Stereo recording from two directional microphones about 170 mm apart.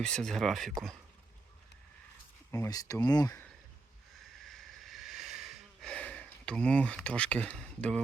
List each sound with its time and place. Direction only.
0.0 s speech: 5° left (ahead or behind)
2.5 s speech: 20° left (ahead or behind)
4.4 s a sound: centre (ahead or behind)